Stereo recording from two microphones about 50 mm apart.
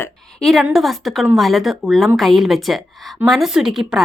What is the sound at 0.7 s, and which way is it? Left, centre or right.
A woman's voice, centre.